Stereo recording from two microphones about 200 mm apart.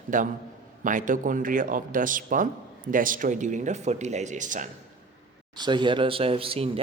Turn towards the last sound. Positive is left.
turn(degrees=-30)  # may be behind; listen again after turning